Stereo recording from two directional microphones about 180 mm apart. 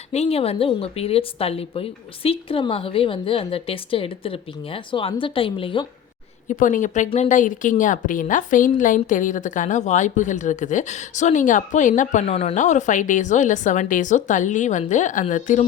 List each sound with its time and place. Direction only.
0.1 s a woman's voice: 35° left (ahead or behind)
6.5 s a woman's voice: 45° left (ahead or behind)